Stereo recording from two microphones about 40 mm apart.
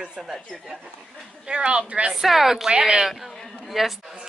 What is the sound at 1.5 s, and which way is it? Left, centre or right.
Speech, right.